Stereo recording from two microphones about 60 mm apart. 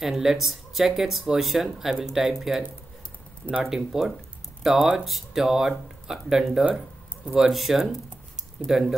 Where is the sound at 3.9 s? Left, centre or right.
Centre.